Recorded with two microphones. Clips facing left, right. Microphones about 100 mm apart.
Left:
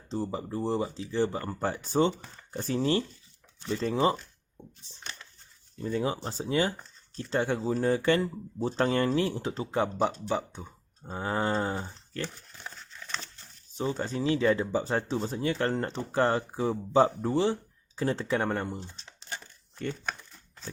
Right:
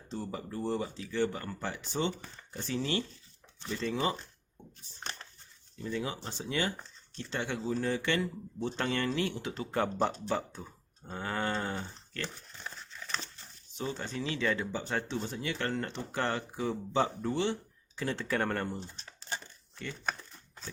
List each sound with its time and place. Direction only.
0.1 s speech: 30° left (ahead or behind)
1.6 s speech: 45° left (ahead or behind)
5.8 s speech: 35° left (ahead or behind)
9.7 s speech: 15° left (ahead or behind)
11.0 s speech: 30° left (ahead or behind)
13.7 s speech: 35° left (ahead or behind)
18.3 s speech: 15° left (ahead or behind)
19.7 s speech: 40° left (ahead or behind)